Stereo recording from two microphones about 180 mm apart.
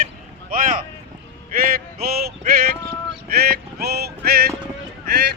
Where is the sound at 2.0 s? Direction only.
55° right (ahead or behind).